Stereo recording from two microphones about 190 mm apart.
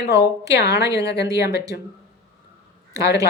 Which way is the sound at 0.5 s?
60° left (ahead or behind).